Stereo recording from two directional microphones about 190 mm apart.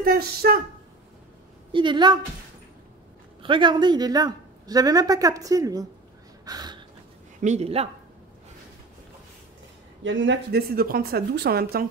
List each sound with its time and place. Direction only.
0.0 s a woman's voice: 55° right (ahead or behind)
1.7 s speech: 25° right (ahead or behind)
3.4 s speech: 25° right (ahead or behind)
6.4 s a sound: 20° right (ahead or behind)
7.3 s speech: 40° right (ahead or behind)
10.0 s a woman's voice: 75° right (ahead or behind); by 11.8 s 55° right (ahead or behind)